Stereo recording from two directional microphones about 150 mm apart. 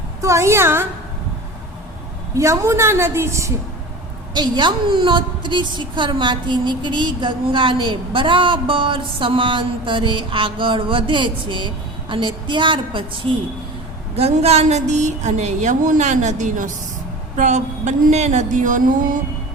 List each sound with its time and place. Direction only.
0.2 s a woman's voice: 20° right (ahead or behind)
2.3 s a woman's voice: 20° right (ahead or behind)
4.4 s a woman's voice: 30° right (ahead or behind)
14.2 s a woman's voice: 45° right (ahead or behind)